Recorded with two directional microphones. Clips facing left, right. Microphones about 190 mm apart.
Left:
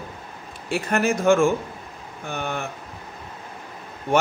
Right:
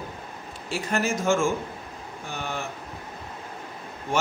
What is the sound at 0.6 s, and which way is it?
Speech, 60° left (ahead or behind).